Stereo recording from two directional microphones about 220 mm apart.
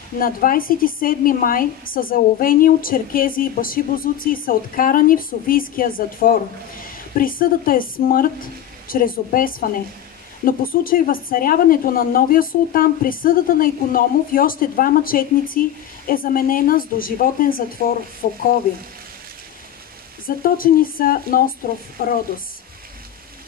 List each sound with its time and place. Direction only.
0.2 s a woman's voice: 40° left (ahead or behind)
20.2 s a woman's voice: 40° left (ahead or behind)